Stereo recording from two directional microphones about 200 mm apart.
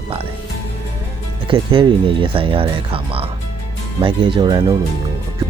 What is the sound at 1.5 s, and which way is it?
Speech, 25° right (ahead or behind).